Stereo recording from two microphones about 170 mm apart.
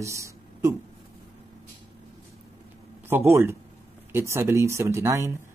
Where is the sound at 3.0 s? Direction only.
15° right (ahead or behind).